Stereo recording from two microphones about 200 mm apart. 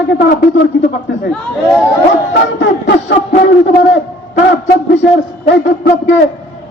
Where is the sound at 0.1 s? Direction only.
60° left (ahead or behind).